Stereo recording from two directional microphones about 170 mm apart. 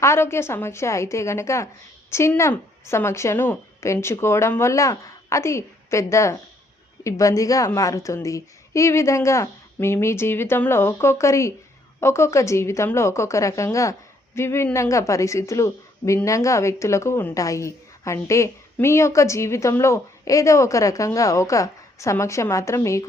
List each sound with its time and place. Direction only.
0.0 s speech: 15° left (ahead or behind)